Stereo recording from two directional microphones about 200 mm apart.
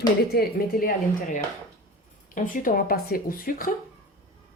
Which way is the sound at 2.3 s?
40° left (ahead or behind).